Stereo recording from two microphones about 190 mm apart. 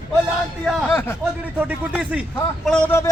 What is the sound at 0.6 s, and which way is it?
Speech, 10° left (ahead or behind).